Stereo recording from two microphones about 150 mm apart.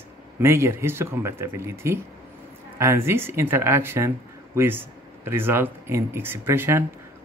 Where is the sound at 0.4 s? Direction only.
15° right (ahead or behind).